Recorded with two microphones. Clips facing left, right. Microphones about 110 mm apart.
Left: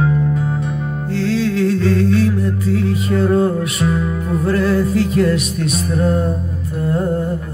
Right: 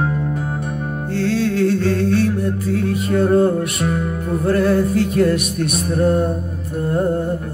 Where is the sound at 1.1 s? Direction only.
55° right (ahead or behind).